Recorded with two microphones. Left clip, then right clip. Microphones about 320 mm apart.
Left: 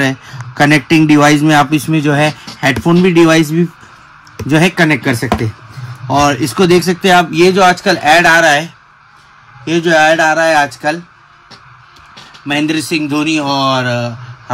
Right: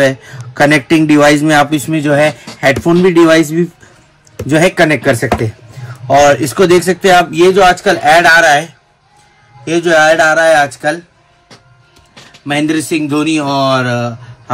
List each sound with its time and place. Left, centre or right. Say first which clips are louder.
0.0 s a man's voice: right 4 dB; centre
9.7 s a man's voice: right 1 dB; centre
13.1 s speech: right 1 dB; centre